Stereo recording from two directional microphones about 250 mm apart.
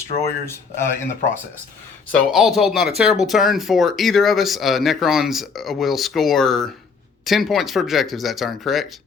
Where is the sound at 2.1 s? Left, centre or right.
Centre.